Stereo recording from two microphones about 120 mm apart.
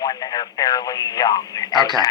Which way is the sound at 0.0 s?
30° left (ahead or behind).